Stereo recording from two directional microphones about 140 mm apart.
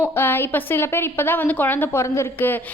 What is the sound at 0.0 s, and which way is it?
A woman's voice, 15° left (ahead or behind).